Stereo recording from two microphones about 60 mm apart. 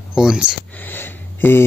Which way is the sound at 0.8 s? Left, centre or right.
Left.